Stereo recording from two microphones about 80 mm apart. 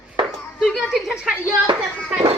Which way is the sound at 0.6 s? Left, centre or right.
Centre.